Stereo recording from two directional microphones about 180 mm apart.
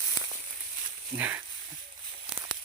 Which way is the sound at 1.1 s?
10° right (ahead or behind).